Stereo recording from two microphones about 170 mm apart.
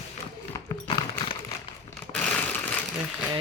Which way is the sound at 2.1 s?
5° left (ahead or behind).